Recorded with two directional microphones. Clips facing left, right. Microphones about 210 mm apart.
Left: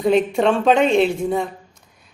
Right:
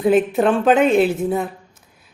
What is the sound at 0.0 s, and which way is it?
A woman's voice, 5° right (ahead or behind).